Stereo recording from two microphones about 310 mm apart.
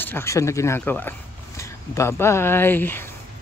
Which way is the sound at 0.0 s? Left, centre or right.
Centre.